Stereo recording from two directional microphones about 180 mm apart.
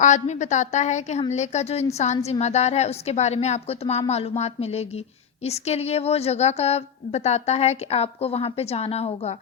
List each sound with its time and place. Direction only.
0.0 s a woman's voice: 40° left (ahead or behind)